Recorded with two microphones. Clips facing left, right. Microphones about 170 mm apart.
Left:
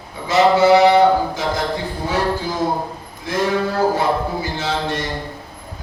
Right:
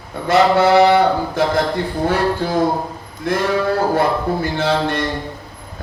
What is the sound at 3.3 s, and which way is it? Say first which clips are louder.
Mantra: right 3 dB; 55° right (ahead or behind).